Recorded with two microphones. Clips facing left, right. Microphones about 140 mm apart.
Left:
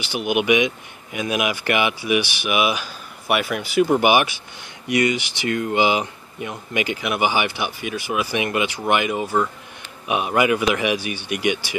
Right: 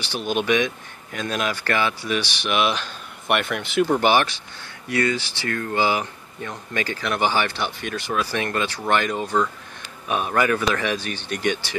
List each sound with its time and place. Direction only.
0.0 s speech: 15° left (ahead or behind)